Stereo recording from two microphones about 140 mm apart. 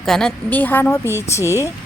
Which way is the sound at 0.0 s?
5° left (ahead or behind).